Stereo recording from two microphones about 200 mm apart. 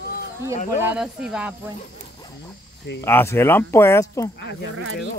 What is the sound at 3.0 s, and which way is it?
Speech, 10° left (ahead or behind).